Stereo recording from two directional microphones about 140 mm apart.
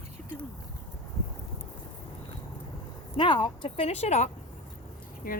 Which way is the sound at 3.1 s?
35° left (ahead or behind).